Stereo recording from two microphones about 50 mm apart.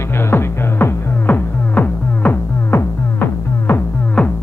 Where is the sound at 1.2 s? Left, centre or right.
Left.